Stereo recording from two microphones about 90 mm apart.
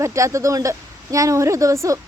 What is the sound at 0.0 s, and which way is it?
Speech, 35° right (ahead or behind).